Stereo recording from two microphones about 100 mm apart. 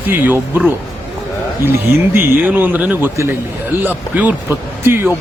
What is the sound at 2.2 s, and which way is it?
Speech, 20° right (ahead or behind).